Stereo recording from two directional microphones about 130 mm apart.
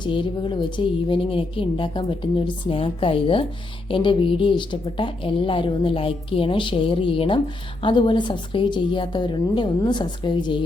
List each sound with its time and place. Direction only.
0.0 s speech: 40° left (ahead or behind)